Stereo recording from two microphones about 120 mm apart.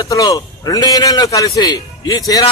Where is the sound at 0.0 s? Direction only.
30° left (ahead or behind).